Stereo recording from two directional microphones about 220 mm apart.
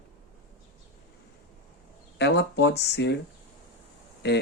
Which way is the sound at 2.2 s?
50° left (ahead or behind).